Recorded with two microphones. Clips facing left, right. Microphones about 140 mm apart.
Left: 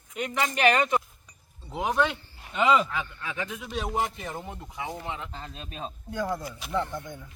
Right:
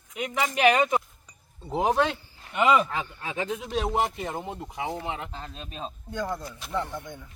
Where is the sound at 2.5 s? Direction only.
15° right (ahead or behind).